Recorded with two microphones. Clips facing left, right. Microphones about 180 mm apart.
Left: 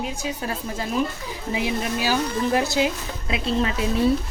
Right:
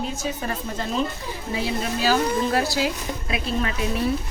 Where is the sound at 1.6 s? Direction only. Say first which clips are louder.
Left 1 dB; 15° left (ahead or behind).